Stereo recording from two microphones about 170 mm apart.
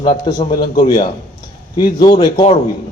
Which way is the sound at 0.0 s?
30° left (ahead or behind).